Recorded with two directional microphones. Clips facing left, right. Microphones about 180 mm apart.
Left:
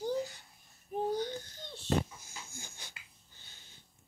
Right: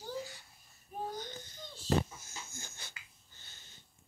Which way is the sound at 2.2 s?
15° left (ahead or behind).